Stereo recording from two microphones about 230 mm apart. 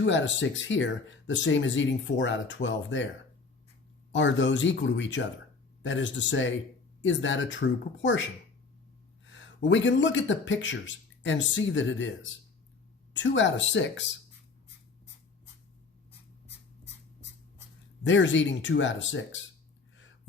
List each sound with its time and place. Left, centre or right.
0.0 s speech: left
4.1 s speech: left
9.2 s a sound: left
9.6 s speech: left
18.0 s speech: left